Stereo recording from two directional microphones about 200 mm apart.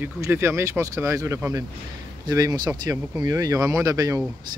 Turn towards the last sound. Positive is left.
turn(degrees=-15)  # may be behind; listen again after turning